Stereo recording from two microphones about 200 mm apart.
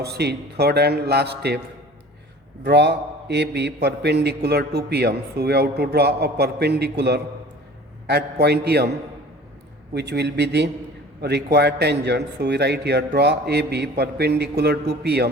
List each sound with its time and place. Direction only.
0.0 s a man's voice: 55° right (ahead or behind)
2.6 s a man's voice: 55° right (ahead or behind)
9.9 s a man's voice: 55° right (ahead or behind)